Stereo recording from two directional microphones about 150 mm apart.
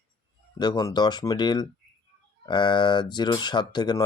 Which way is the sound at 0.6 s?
30° left (ahead or behind).